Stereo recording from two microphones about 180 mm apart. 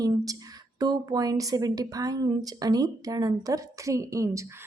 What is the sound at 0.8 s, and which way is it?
A woman's voice, 20° right (ahead or behind).